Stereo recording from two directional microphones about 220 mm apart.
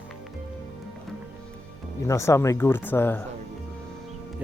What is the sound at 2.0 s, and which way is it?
Speech, 15° left (ahead or behind).